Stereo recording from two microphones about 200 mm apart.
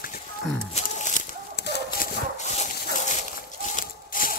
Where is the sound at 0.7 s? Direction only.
35° left (ahead or behind).